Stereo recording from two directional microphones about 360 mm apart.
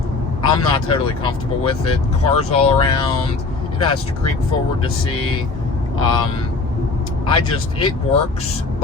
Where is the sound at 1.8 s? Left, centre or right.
Left.